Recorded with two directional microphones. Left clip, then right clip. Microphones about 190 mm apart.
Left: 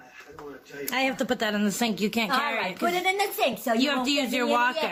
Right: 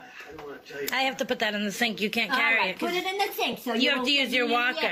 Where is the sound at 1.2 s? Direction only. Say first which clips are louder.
Left 1 dB; 20° left (ahead or behind).